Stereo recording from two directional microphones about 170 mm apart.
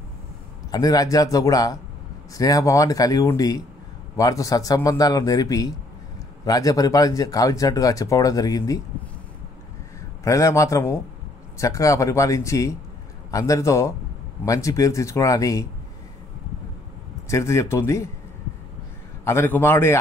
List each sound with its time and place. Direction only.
0.7 s speech: 20° left (ahead or behind)
10.2 s a man's voice: 20° left (ahead or behind)
17.3 s a man's voice: 15° left (ahead or behind)
19.2 s a man's voice: 15° left (ahead or behind)